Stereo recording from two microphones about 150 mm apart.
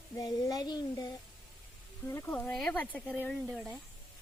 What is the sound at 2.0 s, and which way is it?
Speech, 15° left (ahead or behind).